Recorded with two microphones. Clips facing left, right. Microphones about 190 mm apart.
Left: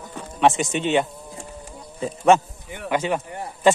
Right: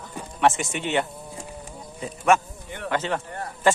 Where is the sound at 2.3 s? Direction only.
25° left (ahead or behind).